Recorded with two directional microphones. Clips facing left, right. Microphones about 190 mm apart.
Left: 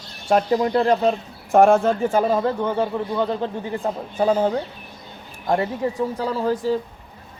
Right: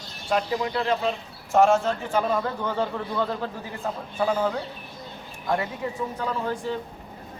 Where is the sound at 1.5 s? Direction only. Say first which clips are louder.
Left 5 dB; 55° left (ahead or behind).